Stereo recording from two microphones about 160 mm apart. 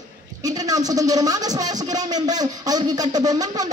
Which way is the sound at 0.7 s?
20° right (ahead or behind).